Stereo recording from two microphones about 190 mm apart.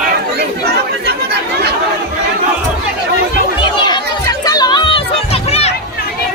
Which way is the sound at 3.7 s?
25° left (ahead or behind).